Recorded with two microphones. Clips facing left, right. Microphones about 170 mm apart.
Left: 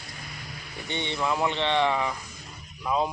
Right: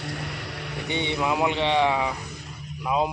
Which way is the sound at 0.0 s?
70° right (ahead or behind).